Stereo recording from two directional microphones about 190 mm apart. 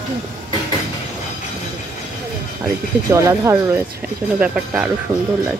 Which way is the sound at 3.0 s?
15° right (ahead or behind).